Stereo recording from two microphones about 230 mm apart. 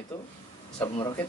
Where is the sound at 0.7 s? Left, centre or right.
Centre.